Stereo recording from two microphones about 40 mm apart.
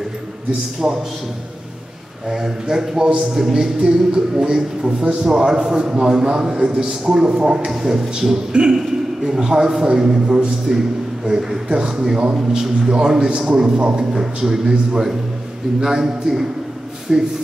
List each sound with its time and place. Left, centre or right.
0.8 s a man's voice: right
2.2 s a man's voice: centre
11.2 s a man's voice: centre